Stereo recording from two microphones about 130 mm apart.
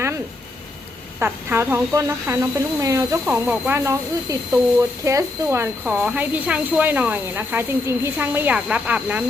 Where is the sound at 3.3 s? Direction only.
15° right (ahead or behind).